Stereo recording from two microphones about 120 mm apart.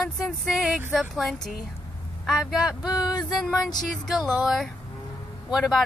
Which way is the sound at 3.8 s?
Centre (ahead or behind).